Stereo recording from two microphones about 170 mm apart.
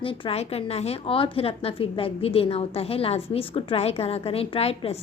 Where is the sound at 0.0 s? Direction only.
30° left (ahead or behind).